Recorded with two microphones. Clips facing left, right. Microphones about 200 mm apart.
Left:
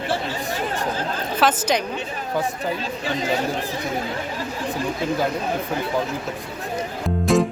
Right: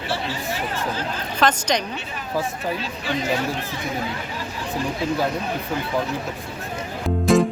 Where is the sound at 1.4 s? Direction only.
5° left (ahead or behind).